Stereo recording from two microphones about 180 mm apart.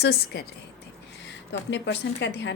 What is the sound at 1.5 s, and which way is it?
Speech, 75° left (ahead or behind).